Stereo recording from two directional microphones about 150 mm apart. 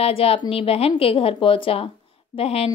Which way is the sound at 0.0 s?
40° left (ahead or behind).